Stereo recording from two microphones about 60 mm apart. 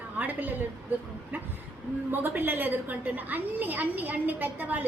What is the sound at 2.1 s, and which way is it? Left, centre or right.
A woman's voice, right.